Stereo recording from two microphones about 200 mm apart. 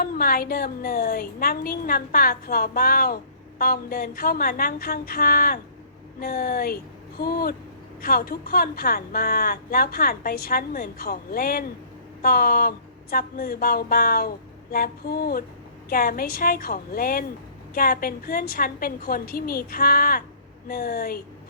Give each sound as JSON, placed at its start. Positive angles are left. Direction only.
{"t": 0.0, "sound": "a woman's voice", "side_deg": 45}